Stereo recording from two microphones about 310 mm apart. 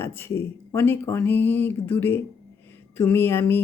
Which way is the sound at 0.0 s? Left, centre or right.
Centre.